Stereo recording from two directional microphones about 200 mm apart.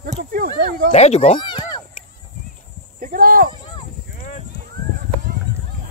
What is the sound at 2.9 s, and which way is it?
Speech, 45° right (ahead or behind).